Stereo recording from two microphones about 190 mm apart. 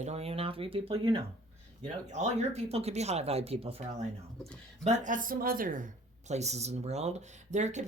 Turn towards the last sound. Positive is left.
turn(degrees=-40)  # may be behind; listen again after turning